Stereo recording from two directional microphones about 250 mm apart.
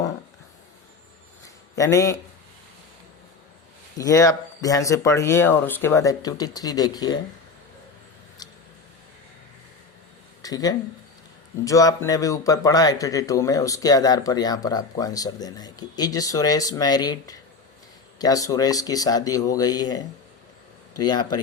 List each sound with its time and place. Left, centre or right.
1.7 s a man's voice: centre
3.9 s speech: centre
10.4 s speech: centre